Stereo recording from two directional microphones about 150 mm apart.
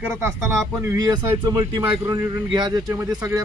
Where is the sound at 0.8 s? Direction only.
20° right (ahead or behind).